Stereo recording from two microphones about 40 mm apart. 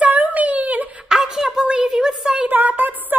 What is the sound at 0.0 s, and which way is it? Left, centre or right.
Whimper, right.